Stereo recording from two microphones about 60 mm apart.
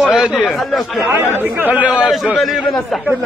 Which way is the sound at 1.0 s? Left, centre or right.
Right.